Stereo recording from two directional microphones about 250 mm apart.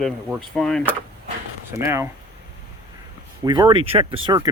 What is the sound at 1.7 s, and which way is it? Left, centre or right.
Speech, centre.